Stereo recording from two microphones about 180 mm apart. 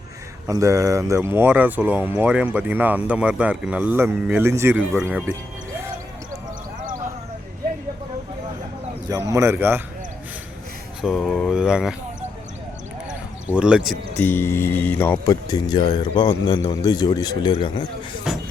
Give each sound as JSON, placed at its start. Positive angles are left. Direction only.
{"t": 0.4, "sound": "speech", "side_deg": -15}
{"t": 9.0, "sound": "speech", "side_deg": -20}
{"t": 11.0, "sound": "speech", "side_deg": 0}
{"t": 13.5, "sound": "speech", "side_deg": -5}
{"t": 14.2, "sound": "speech", "side_deg": 10}
{"t": 18.3, "sound": "music", "side_deg": -5}